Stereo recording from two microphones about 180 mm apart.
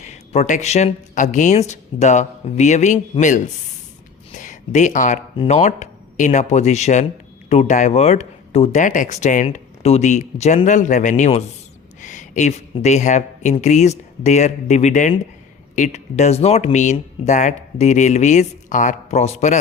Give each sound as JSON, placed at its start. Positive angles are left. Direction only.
{"t": 0.0, "sound": "speech", "side_deg": 40}